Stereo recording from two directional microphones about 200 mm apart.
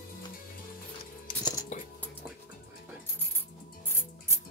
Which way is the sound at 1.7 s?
35° left (ahead or behind).